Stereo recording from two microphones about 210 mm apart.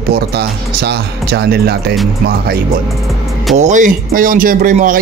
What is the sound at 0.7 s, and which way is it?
A man's voice, 50° right (ahead or behind).